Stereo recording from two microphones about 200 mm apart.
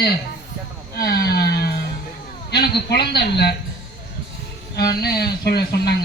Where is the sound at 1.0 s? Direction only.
50° left (ahead or behind).